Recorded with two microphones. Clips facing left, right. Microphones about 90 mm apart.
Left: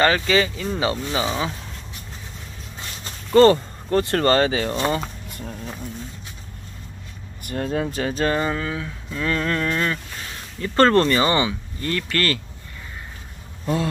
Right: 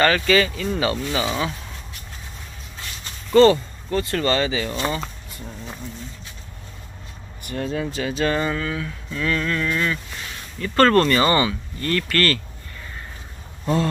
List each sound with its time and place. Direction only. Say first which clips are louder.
0.0 s speech: right 1 dB; 20° left (ahead or behind)
3.3 s speech: even; 40° left (ahead or behind)
3.9 s speech: left 3 dB; 60° left (ahead or behind)
7.4 s speech: left 1 dB; 45° left (ahead or behind)
8.3 s speech: even; 25° left (ahead or behind)
10.6 s speech: even; 25° left (ahead or behind)